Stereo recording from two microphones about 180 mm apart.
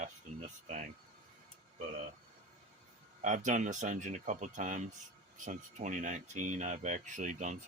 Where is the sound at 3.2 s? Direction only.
45° right (ahead or behind).